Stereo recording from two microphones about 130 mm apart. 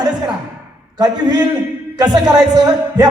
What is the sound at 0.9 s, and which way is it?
A man's voice, 30° right (ahead or behind).